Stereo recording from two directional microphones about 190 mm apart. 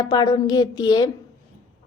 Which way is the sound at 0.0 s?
20° left (ahead or behind).